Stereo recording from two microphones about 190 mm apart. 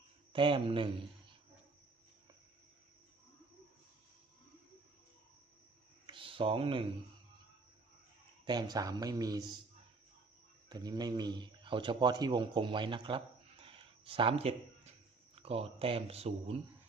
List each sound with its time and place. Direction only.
0.3 s speech: 25° right (ahead or behind)
6.1 s a sound: 25° right (ahead or behind)
8.4 s speech: 20° right (ahead or behind)
10.7 s speech: 20° right (ahead or behind)